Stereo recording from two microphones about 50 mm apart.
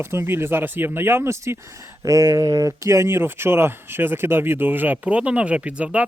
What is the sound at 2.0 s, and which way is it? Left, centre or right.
Speech, right.